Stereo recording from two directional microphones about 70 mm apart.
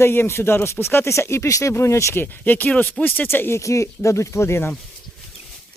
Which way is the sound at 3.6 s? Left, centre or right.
Left.